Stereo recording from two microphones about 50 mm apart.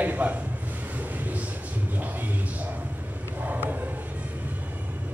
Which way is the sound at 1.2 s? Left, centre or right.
Right.